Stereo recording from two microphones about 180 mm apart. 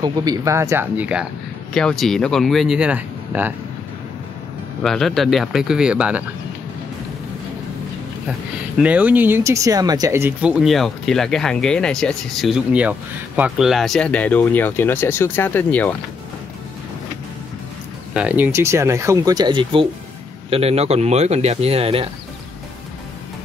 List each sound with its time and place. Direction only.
0.0 s speech: 20° right (ahead or behind)
1.7 s speech: 5° left (ahead or behind)
4.8 s speech: centre (ahead or behind)
8.3 s speech: 5° right (ahead or behind)
18.1 s speech: 10° right (ahead or behind); by 22.1 s 30° right (ahead or behind)